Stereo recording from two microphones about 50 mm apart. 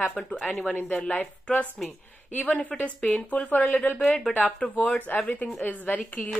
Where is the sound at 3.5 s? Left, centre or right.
Left.